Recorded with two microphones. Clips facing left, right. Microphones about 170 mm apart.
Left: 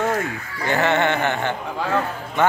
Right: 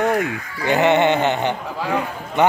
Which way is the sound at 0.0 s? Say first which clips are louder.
Right 3 dB; 15° right (ahead or behind).